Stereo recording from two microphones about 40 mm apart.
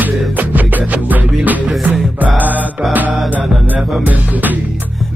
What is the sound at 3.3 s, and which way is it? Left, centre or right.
Music, right.